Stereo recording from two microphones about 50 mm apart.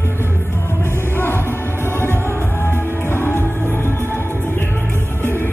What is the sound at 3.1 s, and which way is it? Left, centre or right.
Music, left.